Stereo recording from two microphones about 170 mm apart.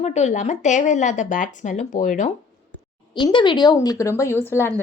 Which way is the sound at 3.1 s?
30° left (ahead or behind).